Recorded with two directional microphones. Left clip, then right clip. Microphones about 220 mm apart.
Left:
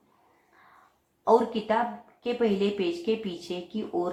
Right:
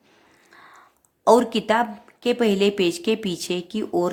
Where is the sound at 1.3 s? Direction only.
55° right (ahead or behind).